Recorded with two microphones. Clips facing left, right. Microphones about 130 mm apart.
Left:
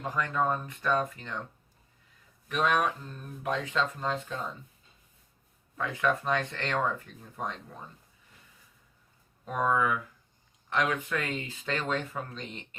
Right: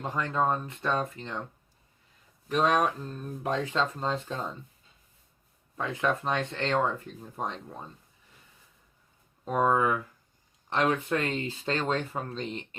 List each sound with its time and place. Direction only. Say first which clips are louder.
0.0 s speech: right 1 dB; 25° right (ahead or behind)
2.5 s speech: right 2 dB; 35° right (ahead or behind)
5.7 s speech: even; 25° right (ahead or behind)
9.4 s speech: right 3 dB; 30° right (ahead or behind)